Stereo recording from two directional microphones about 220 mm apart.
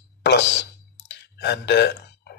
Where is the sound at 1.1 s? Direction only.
50° left (ahead or behind).